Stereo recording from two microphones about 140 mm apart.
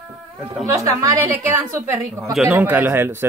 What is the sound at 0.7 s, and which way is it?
A woman's voice, 25° right (ahead or behind).